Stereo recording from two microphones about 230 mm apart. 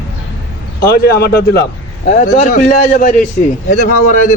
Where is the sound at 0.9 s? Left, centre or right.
Left.